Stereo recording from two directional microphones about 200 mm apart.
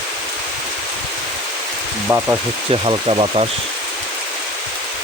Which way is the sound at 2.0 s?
10° right (ahead or behind).